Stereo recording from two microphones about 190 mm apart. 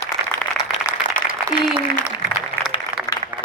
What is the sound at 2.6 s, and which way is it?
Applause, 20° left (ahead or behind).